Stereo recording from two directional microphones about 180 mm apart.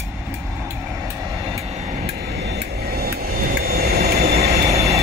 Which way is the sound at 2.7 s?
60° right (ahead or behind).